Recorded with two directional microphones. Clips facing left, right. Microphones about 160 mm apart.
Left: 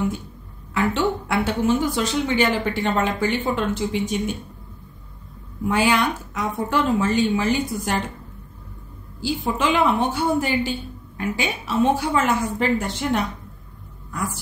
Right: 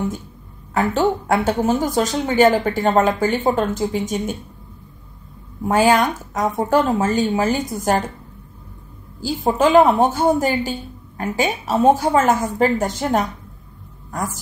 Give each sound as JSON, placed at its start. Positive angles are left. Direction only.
{"t": 0.7, "sound": "a woman's voice", "side_deg": -40}
{"t": 5.6, "sound": "a woman's voice", "side_deg": -45}
{"t": 9.2, "sound": "a woman's voice", "side_deg": -45}